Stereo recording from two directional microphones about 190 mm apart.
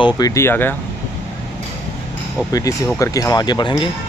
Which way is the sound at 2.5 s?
15° left (ahead or behind).